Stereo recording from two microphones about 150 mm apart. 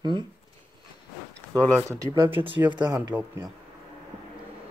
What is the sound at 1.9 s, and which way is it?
Speech, 20° right (ahead or behind).